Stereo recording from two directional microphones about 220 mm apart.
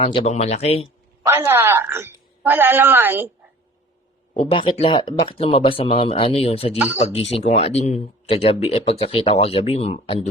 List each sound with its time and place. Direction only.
0.0 s speech: 25° left (ahead or behind)
1.2 s a woman's voice: 10° right (ahead or behind)
4.4 s speech: 25° left (ahead or behind)
6.7 s a woman's voice: 5° right (ahead or behind)
7.0 s speech: 30° left (ahead or behind)